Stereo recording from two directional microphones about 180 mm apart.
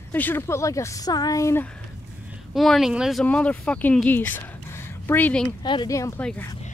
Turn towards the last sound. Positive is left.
turn(degrees=20)  # may be behind; listen again after turning